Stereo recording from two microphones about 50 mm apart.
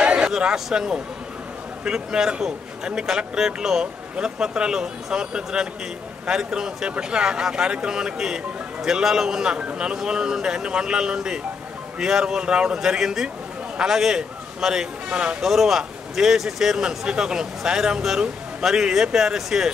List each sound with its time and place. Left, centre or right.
0.0 s a sound: centre
0.7 s a man's voice: centre
15.4 s speech: centre